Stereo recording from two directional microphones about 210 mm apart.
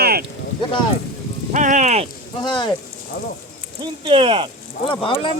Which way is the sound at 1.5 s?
35° right (ahead or behind).